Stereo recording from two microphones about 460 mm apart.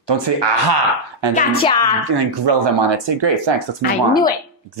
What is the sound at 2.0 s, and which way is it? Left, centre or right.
Speech, right.